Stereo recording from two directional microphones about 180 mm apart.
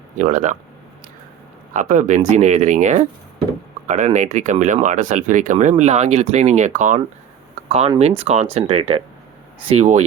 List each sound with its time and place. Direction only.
0.2 s speech: 45° right (ahead or behind)
1.7 s speech: 45° right (ahead or behind)